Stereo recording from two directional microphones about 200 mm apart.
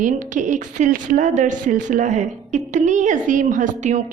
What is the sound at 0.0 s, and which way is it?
A woman's voice, 40° right (ahead or behind).